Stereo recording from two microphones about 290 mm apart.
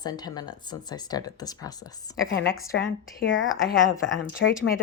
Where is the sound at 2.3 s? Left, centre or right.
Left.